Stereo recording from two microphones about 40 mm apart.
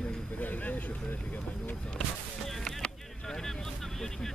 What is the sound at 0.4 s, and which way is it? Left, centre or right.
Vehicle, left.